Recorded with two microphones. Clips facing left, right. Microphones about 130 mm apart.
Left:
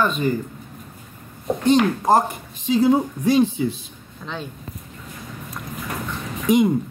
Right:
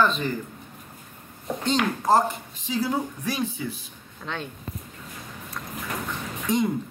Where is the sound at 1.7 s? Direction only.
15° left (ahead or behind).